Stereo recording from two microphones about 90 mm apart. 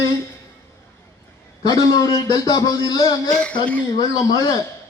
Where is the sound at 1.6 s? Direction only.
45° left (ahead or behind).